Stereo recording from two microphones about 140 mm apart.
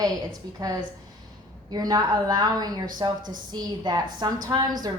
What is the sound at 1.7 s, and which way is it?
A woman's voice, 30° right (ahead or behind).